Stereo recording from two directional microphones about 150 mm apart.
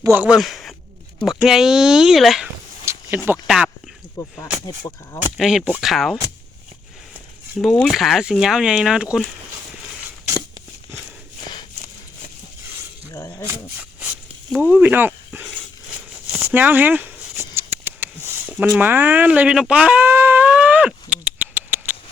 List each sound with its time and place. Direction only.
0.0 s speech: 10° right (ahead or behind)
2.8 s a sound: 15° right (ahead or behind)
3.3 s speech: 5° right (ahead or behind)
4.2 s speech: 20° left (ahead or behind)
5.4 s speech: centre (ahead or behind)
7.9 s speech: centre (ahead or behind)
13.1 s speech: 20° left (ahead or behind)
14.5 s speech: 10° right (ahead or behind)
16.4 s a sound: 15° right (ahead or behind)
18.7 s speech: 15° right (ahead or behind)